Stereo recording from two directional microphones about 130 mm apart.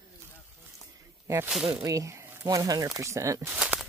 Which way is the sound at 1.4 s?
5° right (ahead or behind).